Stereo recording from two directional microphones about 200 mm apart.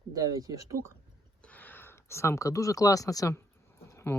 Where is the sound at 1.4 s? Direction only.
10° left (ahead or behind).